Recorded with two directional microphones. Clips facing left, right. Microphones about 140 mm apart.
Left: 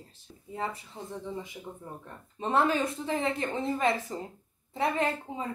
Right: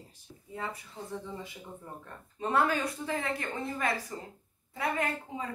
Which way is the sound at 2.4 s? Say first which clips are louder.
Left 2 dB; 25° left (ahead or behind).